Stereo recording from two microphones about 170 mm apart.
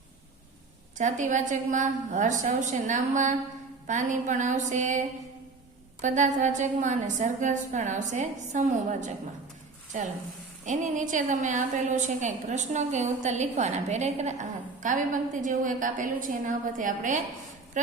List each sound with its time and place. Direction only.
0.9 s a woman's voice: 45° right (ahead or behind)